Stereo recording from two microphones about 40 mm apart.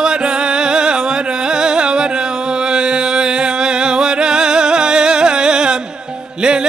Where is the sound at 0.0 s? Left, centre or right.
Right.